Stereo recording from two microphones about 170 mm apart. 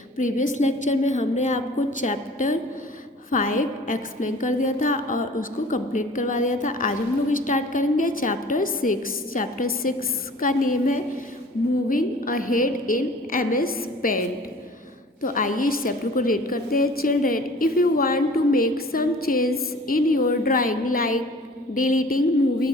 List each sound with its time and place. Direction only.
0.2 s a woman's voice: 50° left (ahead or behind)